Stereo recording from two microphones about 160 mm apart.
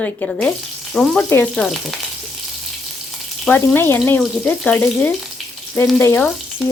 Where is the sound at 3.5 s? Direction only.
15° left (ahead or behind).